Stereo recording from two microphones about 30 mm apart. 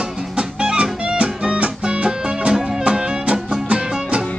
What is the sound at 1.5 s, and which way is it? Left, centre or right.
Music, right.